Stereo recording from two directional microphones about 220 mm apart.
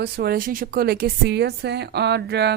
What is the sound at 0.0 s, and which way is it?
Speech, 45° right (ahead or behind).